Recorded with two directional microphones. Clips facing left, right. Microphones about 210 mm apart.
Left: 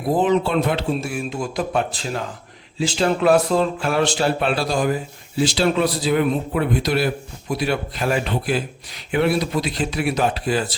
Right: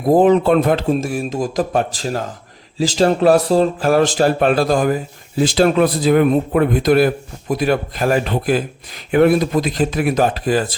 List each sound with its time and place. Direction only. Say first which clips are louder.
0.0 s a man's voice: right 6 dB; 45° right (ahead or behind)
3.0 s a man's voice: right 4 dB; 40° right (ahead or behind)